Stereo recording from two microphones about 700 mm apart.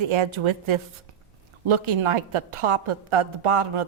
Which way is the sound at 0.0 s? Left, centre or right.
Right.